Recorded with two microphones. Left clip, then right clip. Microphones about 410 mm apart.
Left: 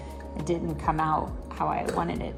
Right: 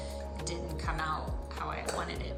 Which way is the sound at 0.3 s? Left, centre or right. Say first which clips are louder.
Left 12 dB; centre.